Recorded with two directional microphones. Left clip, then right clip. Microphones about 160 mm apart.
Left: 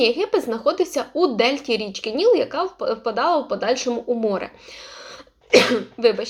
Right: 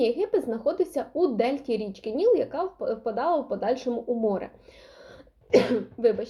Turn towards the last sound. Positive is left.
turn(degrees=10)  # may be behind; listen again after turning